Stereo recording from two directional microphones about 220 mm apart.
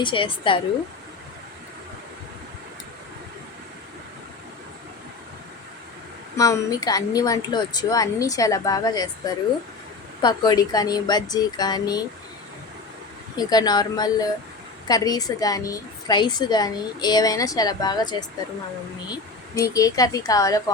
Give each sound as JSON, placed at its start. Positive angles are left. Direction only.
{"t": 0.0, "sound": "a woman's voice", "side_deg": 20}
{"t": 6.3, "sound": "a woman's voice", "side_deg": 15}
{"t": 13.3, "sound": "a woman's voice", "side_deg": 20}
{"t": 19.7, "sound": "a woman's voice", "side_deg": 15}